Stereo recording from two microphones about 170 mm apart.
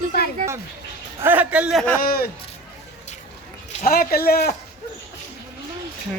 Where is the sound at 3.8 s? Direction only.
60° left (ahead or behind).